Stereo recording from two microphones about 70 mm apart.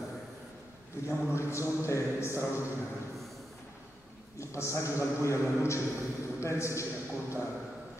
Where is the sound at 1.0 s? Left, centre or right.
Left.